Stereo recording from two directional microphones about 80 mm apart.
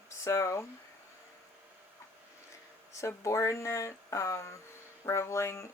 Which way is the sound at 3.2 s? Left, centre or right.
Left.